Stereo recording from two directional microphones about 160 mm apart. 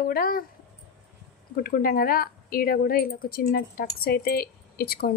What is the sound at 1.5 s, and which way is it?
A woman's voice, 65° left (ahead or behind).